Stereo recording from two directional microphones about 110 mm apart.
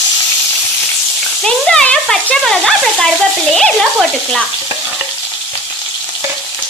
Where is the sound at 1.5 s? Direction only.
5° left (ahead or behind).